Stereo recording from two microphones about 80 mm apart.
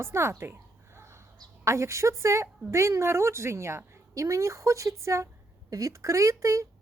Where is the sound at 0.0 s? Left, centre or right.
Right.